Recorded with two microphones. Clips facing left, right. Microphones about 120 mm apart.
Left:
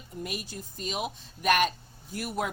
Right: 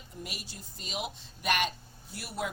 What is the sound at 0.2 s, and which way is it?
A woman's voice, 50° left (ahead or behind).